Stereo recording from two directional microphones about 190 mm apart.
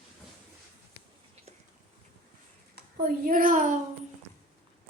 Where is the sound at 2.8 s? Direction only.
50° right (ahead or behind).